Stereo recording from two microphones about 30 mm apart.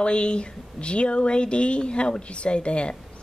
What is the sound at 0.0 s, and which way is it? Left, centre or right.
Speech, left.